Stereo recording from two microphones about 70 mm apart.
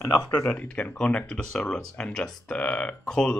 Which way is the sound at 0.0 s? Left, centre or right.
Left.